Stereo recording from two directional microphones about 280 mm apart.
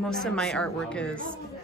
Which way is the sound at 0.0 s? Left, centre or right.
Centre.